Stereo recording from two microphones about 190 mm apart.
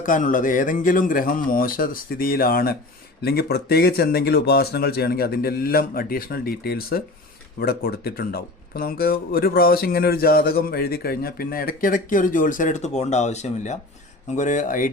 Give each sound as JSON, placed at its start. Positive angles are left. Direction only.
{"t": 0.0, "sound": "speech", "side_deg": 45}